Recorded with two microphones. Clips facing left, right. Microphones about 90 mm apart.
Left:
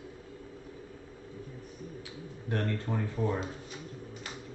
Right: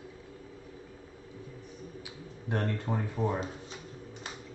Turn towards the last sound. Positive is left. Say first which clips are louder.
# even
turn(degrees=-20)  # may be behind; listen again after turning